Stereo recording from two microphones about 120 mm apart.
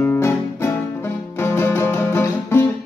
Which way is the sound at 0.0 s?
20° left (ahead or behind).